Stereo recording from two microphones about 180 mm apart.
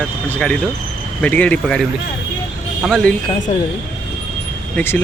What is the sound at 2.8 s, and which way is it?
Speech, centre (ahead or behind).